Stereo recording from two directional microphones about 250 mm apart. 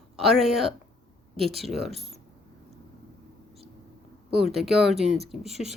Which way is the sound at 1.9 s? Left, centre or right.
Right.